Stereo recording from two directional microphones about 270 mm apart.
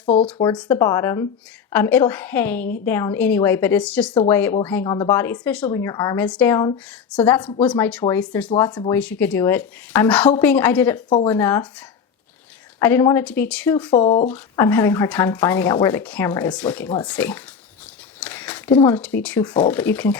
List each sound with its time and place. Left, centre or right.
0.0 s speech: centre
12.8 s speech: centre
13.9 s speech: centre
14.3 s speech: centre
18.2 s a sound: centre
18.9 s speech: centre